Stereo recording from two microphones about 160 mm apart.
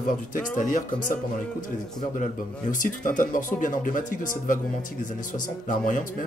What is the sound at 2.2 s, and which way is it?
Speech, 55° left (ahead or behind).